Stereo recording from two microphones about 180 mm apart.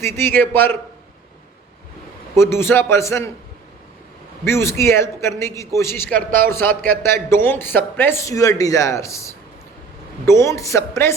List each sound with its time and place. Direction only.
0.0 s a man's voice: 15° left (ahead or behind)
2.3 s a man's voice: 15° left (ahead or behind)
4.4 s a man's voice: 15° left (ahead or behind)